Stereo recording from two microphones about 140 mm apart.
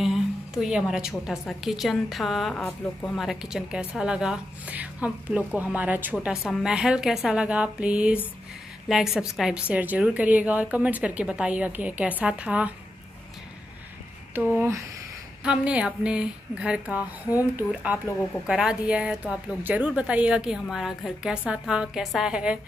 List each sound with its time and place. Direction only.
0.0 s a woman's voice: centre (ahead or behind)
14.3 s a woman's voice: 15° right (ahead or behind)